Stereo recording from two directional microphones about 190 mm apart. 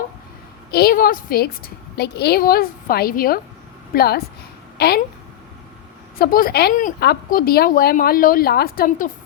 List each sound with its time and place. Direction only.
0.7 s a woman's voice: 55° left (ahead or behind)
6.1 s a woman's voice: 50° left (ahead or behind)